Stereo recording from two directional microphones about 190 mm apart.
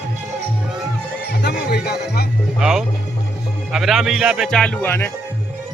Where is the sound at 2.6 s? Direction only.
5° right (ahead or behind).